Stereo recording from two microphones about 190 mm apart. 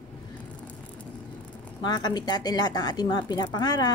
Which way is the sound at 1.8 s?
20° left (ahead or behind).